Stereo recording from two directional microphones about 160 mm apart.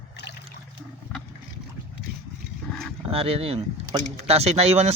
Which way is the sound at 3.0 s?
35° right (ahead or behind).